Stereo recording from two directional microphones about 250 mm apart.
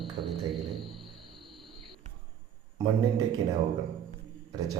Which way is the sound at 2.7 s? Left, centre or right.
Centre.